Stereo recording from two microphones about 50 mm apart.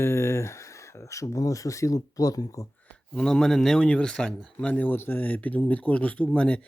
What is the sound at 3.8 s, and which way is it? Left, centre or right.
Speech, left.